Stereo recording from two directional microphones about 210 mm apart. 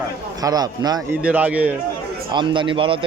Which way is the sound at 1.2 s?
5° right (ahead or behind).